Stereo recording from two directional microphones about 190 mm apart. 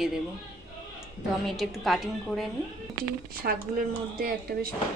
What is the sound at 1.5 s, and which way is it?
A woman's voice, centre (ahead or behind).